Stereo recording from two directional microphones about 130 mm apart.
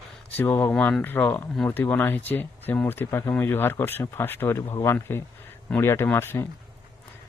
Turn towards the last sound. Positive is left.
turn(degrees=20)  # may be behind; listen again after turning